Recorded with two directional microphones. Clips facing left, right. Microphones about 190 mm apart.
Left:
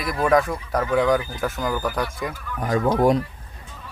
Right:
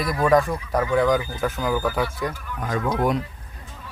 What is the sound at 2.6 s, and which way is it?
Speech, 30° left (ahead or behind).